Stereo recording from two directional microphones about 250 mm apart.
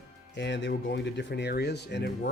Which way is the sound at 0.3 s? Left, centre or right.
Left.